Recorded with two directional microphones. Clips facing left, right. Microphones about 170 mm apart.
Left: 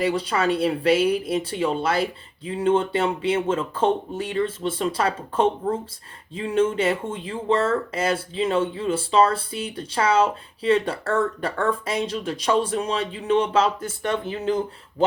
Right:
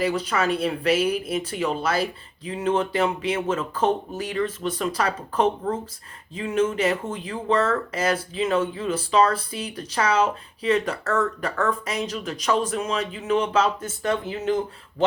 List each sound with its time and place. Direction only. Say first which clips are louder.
0.0 s speech: left 1 dB; 30° left (ahead or behind)